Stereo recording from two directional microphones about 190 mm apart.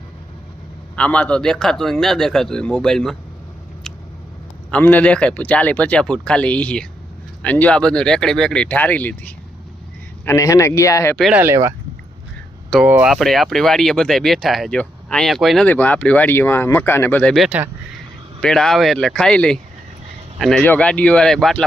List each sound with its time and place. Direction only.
0.9 s speech: 5° left (ahead or behind)
4.7 s a man's voice: 10° left (ahead or behind)
11.2 s speech: 10° right (ahead or behind)
12.8 s a man's voice: 5° right (ahead or behind)